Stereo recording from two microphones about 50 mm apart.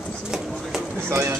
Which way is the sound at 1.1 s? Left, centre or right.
Right.